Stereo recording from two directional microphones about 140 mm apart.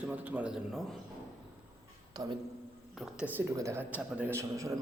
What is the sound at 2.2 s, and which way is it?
Speech, 30° right (ahead or behind).